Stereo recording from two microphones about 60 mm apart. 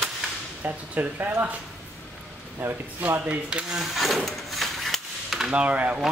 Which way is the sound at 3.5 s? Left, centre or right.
Centre.